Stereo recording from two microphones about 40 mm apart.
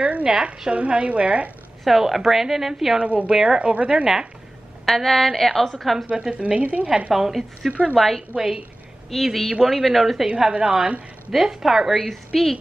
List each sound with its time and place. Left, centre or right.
0.0 s a woman's voice: right
1.9 s a woman's voice: centre
3.0 s a woman's voice: right
3.3 s a woman's voice: centre
3.5 s a woman's voice: right
4.8 s a woman's voice: centre
6.3 s a woman's voice: right
7.2 s a woman's voice: centre
8.3 s a woman's voice: right
9.1 s a woman's voice: centre
10.2 s a woman's voice: right
11.6 s a woman's voice: centre
12.3 s a woman's voice: centre